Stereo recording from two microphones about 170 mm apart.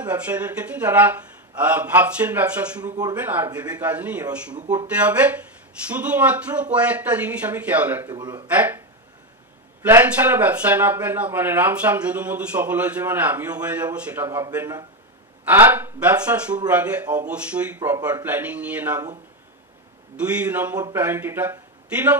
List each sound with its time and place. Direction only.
0.0 s speech: 10° right (ahead or behind)
8.1 s speech: 25° right (ahead or behind)
8.5 s speech: 10° right (ahead or behind)
9.8 s speech: 10° right (ahead or behind)
20.2 s speech: 10° right (ahead or behind)